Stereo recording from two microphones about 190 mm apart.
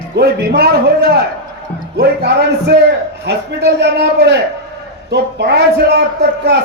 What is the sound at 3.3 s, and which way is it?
Speech, 60° right (ahead or behind).